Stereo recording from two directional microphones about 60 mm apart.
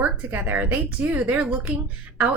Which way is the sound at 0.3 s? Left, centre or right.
Right.